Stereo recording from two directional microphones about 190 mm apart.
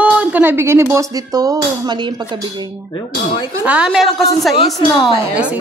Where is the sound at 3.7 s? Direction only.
5° right (ahead or behind).